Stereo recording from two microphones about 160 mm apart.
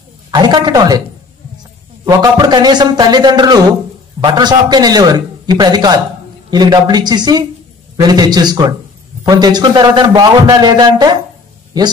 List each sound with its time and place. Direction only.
0.3 s a man's voice: 25° right (ahead or behind)
2.0 s a man's voice: 25° right (ahead or behind)